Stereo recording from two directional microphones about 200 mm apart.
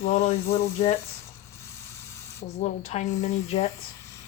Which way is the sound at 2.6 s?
30° left (ahead or behind).